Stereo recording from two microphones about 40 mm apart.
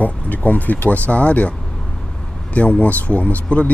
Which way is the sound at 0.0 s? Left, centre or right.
Left.